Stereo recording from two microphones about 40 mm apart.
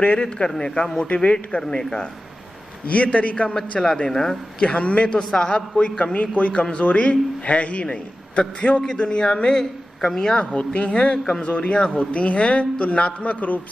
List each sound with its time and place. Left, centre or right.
0.6 s a man's voice: left
1.0 s a man's voice: left
1.6 s a man's voice: centre
2.9 s a man's voice: left
3.8 s a man's voice: centre
4.6 s a man's voice: left
9.2 s a man's voice: left
10.4 s a man's voice: left